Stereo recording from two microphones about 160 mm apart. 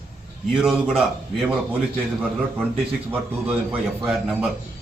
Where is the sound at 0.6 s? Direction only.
5° right (ahead or behind).